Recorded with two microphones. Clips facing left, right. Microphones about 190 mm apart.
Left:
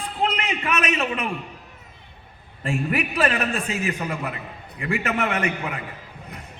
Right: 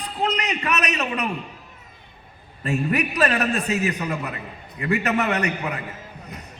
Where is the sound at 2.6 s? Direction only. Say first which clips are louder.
Right 2 dB; 40° right (ahead or behind).